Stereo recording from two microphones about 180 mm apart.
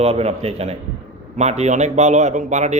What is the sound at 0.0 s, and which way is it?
A man's voice, 35° right (ahead or behind).